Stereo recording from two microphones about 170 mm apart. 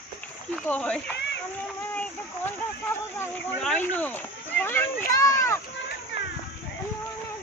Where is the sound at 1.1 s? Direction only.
90° left.